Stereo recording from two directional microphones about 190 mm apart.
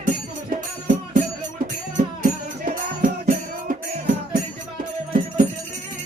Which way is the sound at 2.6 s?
40° right (ahead or behind).